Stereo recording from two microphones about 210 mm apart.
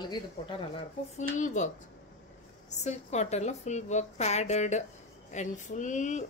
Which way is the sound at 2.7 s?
35° left (ahead or behind).